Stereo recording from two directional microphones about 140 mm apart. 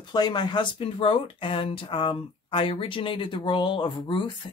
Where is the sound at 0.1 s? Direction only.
30° left (ahead or behind).